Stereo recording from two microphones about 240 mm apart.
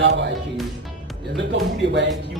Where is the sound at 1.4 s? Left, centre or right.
Right.